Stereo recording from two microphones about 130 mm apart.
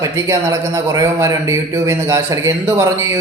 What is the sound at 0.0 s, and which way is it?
A man's voice, 25° right (ahead or behind).